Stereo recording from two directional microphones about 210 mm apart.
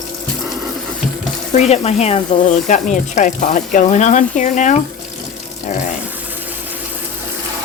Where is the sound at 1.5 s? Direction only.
30° left (ahead or behind).